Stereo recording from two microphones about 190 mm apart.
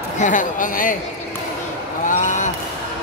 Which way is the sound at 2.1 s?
40° left (ahead or behind).